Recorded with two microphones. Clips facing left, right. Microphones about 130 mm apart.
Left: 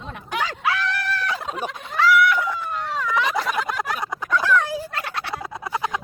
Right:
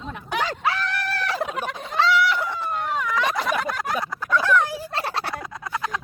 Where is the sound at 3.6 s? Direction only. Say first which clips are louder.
Even; 20° left (ahead or behind).